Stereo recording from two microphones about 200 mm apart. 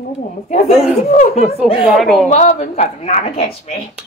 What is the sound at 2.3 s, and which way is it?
A woman's voice, 35° left (ahead or behind).